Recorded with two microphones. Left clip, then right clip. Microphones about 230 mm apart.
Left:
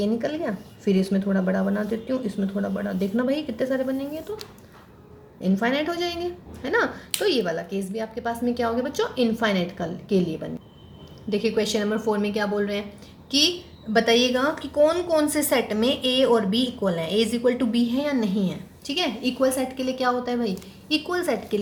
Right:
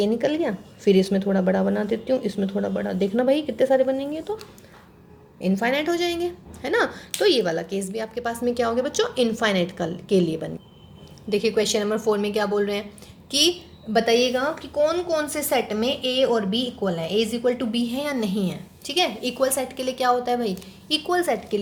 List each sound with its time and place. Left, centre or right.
0.0 s speech: right
5.4 s speech: right
13.9 s a woman's voice: right